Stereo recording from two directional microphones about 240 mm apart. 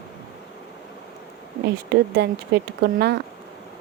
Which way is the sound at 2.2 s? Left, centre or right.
Right.